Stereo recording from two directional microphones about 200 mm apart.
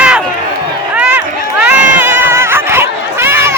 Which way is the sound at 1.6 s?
5° right (ahead or behind).